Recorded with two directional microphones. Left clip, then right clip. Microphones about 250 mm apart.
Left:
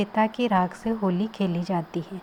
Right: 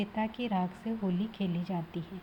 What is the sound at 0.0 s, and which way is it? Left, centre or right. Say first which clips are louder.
A woman's voice: left 11 dB; centre.